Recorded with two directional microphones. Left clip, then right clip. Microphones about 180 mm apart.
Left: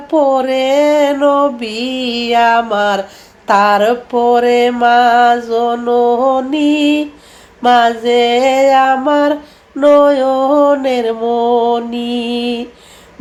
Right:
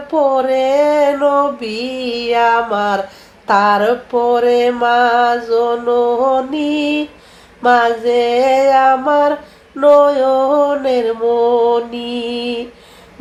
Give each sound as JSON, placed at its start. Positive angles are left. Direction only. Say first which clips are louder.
{"t": 0.1, "sound": "mantra", "louder": "left 2 dB", "side_deg": 30}